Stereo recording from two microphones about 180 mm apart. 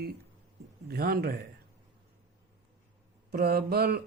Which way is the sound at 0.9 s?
55° right (ahead or behind).